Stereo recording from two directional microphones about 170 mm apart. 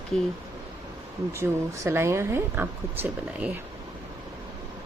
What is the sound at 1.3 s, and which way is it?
A woman's voice, 15° right (ahead or behind).